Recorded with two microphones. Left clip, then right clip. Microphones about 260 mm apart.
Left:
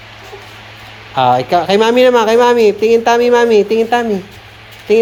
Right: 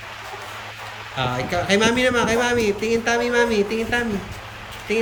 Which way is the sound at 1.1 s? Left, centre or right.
Centre.